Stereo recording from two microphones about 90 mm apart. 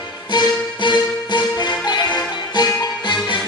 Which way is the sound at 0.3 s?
55° left (ahead or behind).